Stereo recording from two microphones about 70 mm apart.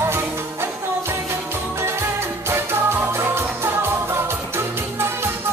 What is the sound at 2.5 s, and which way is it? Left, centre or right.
Music, right.